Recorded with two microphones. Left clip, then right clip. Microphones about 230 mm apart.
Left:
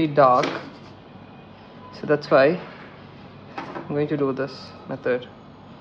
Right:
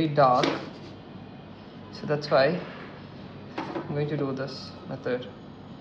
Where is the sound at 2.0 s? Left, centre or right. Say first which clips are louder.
Left 6 dB; left.